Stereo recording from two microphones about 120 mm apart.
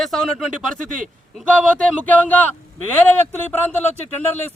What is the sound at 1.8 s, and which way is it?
Speech, 15° left (ahead or behind).